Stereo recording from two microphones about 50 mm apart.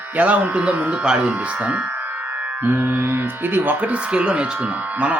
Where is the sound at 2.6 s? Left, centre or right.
Right.